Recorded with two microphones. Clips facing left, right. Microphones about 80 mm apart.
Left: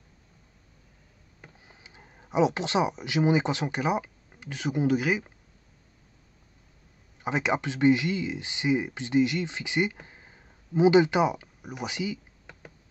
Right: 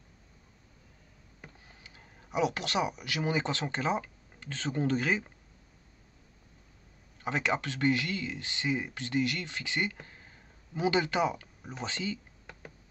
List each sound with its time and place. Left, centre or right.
1.7 s speech: centre
7.2 s speech: centre